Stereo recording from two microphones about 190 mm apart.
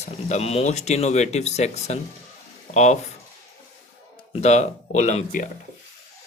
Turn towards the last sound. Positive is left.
turn(degrees=40)  # may be behind; listen again after turning